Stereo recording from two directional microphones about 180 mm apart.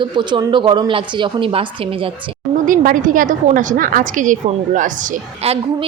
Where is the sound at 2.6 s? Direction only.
50° right (ahead or behind).